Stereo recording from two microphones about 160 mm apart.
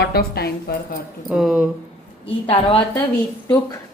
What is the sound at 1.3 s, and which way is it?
Speech, 5° right (ahead or behind).